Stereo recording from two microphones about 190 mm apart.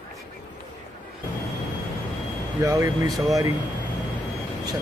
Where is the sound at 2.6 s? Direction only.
15° right (ahead or behind).